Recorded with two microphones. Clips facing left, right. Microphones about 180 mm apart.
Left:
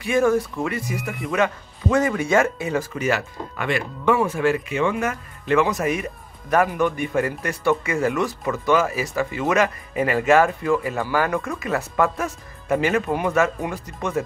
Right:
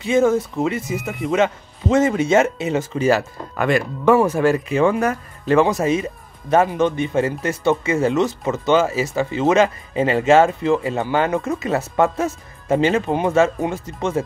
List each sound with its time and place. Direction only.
0.0 s speech: 20° right (ahead or behind)